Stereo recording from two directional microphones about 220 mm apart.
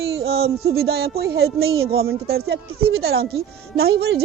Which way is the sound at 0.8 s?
45° right (ahead or behind).